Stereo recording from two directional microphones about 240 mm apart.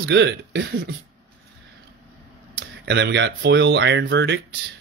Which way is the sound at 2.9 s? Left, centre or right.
Right.